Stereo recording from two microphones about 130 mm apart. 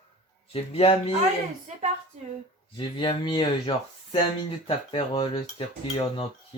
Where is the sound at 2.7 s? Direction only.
40° left (ahead or behind).